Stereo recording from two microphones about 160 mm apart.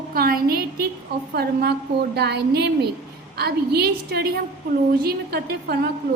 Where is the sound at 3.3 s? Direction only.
80° right.